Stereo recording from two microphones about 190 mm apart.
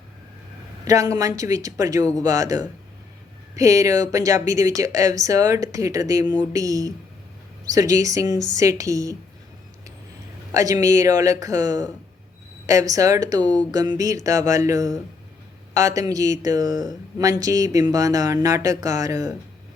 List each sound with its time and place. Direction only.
0.9 s speech: 20° right (ahead or behind)
10.5 s speech: 20° right (ahead or behind)